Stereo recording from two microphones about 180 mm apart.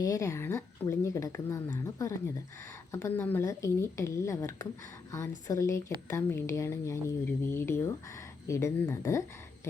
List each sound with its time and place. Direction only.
0.0 s speech: 20° left (ahead or behind)